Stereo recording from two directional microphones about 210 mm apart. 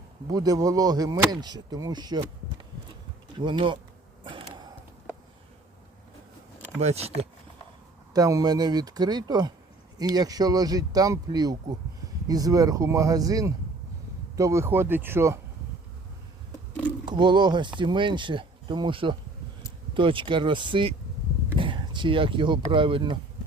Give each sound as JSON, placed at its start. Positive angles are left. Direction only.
{"t": 0.3, "sound": "speech", "side_deg": -15}
{"t": 4.2, "sound": "a sound", "side_deg": -25}
{"t": 6.7, "sound": "speech", "side_deg": -30}
{"t": 8.1, "sound": "speech", "side_deg": -15}
{"t": 17.1, "sound": "speech", "side_deg": -20}